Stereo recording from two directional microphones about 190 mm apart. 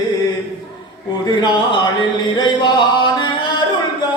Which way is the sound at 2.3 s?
20° left (ahead or behind).